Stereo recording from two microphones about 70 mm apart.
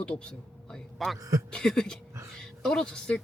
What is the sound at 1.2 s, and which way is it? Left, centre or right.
Speech, right.